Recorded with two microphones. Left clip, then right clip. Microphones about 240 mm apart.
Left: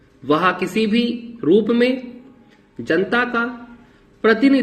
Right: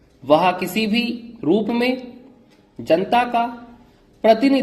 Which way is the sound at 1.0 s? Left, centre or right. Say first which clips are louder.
Left 3 dB; right.